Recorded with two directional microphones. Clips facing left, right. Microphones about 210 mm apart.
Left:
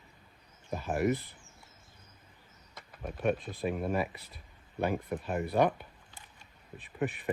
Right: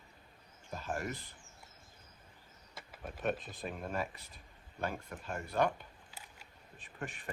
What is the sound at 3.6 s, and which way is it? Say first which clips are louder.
Speech: left 8 dB; 10° left (ahead or behind).